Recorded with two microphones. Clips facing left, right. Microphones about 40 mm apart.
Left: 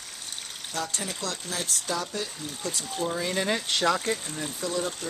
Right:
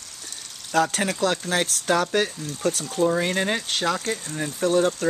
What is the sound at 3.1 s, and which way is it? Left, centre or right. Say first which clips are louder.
Speech: right 5 dB; right.